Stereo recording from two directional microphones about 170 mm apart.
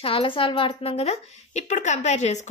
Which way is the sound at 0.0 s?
30° left (ahead or behind).